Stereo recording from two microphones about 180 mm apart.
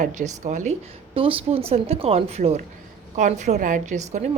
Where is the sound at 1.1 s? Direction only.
30° right (ahead or behind).